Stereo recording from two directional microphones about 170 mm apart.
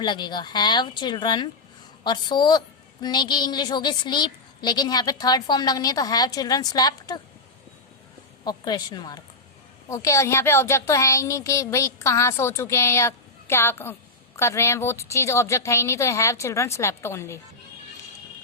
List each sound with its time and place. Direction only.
0.0 s a woman's voice: 25° left (ahead or behind)
8.4 s a woman's voice: 25° left (ahead or behind)